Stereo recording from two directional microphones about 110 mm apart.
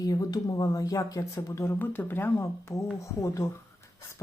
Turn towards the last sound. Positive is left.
turn(degrees=30)  # may be behind; listen again after turning